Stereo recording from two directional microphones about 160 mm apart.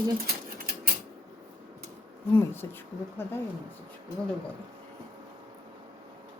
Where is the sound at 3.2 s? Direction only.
15° left (ahead or behind).